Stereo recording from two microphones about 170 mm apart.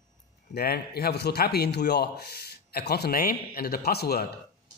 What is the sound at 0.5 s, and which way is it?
A man's voice, 65° left (ahead or behind).